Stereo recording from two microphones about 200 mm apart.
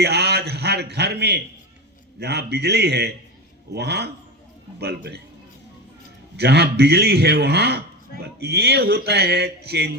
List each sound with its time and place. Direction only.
0.0 s a sound: 55° right (ahead or behind)
2.1 s speech: 55° right (ahead or behind)
6.3 s speech: 55° right (ahead or behind)